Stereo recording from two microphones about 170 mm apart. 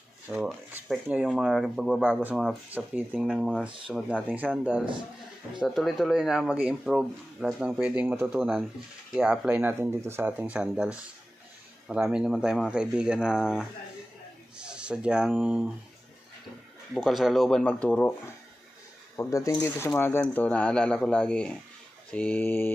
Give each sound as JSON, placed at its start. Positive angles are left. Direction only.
{"t": 0.3, "sound": "speech", "side_deg": -5}
{"t": 3.6, "sound": "speech", "side_deg": -30}
{"t": 4.4, "sound": "speech", "side_deg": -10}
{"t": 16.9, "sound": "speech", "side_deg": 0}
{"t": 19.1, "sound": "speech", "side_deg": 20}